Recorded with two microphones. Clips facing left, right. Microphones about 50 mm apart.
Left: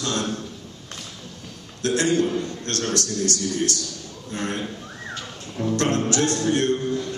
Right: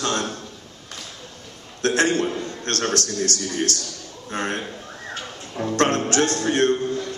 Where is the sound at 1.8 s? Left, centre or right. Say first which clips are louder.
Right 1 dB; right.